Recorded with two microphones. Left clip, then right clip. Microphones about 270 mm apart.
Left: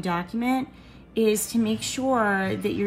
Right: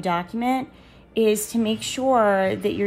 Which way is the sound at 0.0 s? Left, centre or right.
Right.